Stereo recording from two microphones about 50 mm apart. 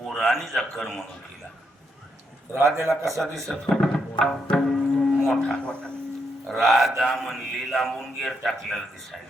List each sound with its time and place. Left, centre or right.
0.1 s a man's voice: centre
2.5 s a man's voice: right
3.2 s speech: centre
4.6 s a sound: centre
5.4 s speech: centre
6.5 s a man's voice: centre